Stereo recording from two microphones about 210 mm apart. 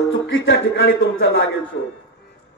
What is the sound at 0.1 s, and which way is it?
A man's voice, 65° left (ahead or behind).